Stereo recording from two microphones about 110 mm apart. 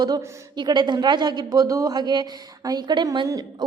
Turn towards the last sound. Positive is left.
turn(degrees=-45)  # may be behind; listen again after turning